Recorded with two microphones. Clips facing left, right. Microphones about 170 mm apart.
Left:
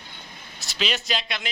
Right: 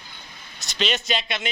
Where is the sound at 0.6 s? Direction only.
Centre (ahead or behind).